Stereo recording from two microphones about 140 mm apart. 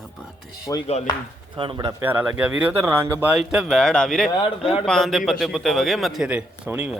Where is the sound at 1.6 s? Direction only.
35° right (ahead or behind).